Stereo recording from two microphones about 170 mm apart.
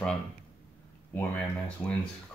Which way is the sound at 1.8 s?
5° left (ahead or behind).